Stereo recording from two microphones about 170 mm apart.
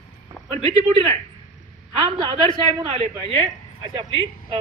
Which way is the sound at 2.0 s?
30° right (ahead or behind).